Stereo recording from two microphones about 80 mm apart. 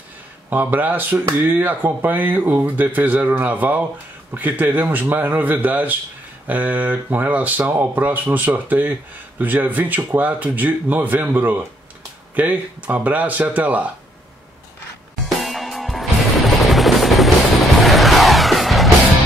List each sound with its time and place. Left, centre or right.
0.5 s speech: right
15.2 s music: centre